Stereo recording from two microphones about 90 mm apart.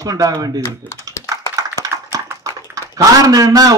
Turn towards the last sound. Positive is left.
turn(degrees=-45)  # may be behind; listen again after turning